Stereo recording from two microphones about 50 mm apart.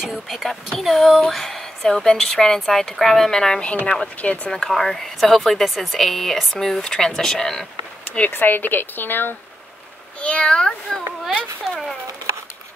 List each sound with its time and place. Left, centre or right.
0.0 s speech: centre
0.7 s a woman's voice: centre
3.6 s speech: left
4.5 s a woman's voice: centre
8.3 s speech: left
10.2 s speech: left